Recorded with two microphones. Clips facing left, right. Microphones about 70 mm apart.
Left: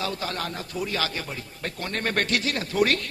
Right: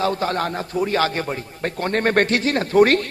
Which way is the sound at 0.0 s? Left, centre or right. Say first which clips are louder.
Right 9 dB; right.